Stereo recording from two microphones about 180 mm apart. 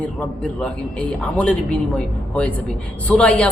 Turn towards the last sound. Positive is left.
turn(degrees=5)  # may be behind; listen again after turning